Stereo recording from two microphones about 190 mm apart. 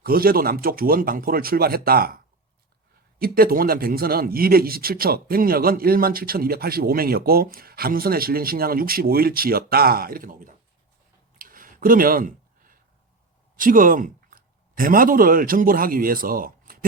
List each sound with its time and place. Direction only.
0.0 s speech: 50° right (ahead or behind)
11.3 s a sound: 45° right (ahead or behind)
13.6 s a man's voice: 45° right (ahead or behind)